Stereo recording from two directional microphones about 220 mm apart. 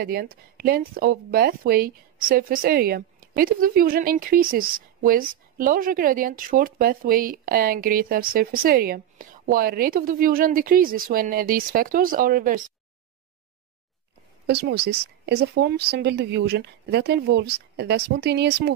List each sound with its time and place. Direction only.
0.0 s speech: 45° right (ahead or behind)
14.4 s speech: 50° right (ahead or behind)